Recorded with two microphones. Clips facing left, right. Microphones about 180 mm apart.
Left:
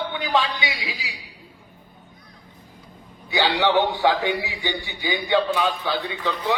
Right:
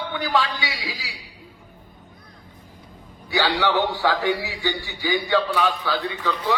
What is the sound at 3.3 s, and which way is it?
A man's voice, 20° left (ahead or behind).